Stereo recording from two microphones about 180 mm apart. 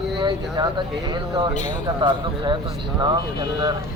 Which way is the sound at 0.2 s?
25° right (ahead or behind).